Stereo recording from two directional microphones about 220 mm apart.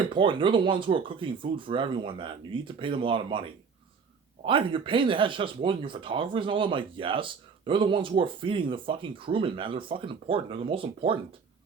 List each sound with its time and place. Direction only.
0.0 s speech: 20° right (ahead or behind)